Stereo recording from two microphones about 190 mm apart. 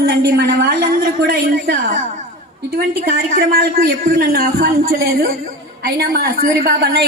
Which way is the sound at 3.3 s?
50° right (ahead or behind).